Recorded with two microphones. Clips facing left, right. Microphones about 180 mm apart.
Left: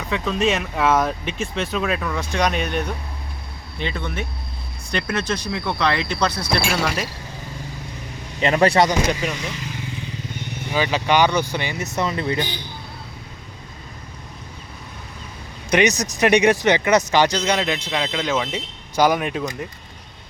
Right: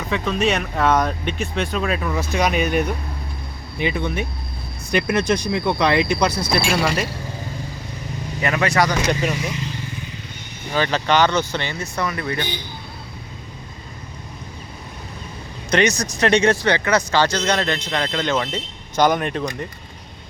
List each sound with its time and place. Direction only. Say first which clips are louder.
0.1 s speech: even; centre (ahead or behind)
8.4 s speech: left 3 dB; 30° left (ahead or behind)
10.8 s speech: even; 10° left (ahead or behind)
15.7 s speech: even; 15° left (ahead or behind)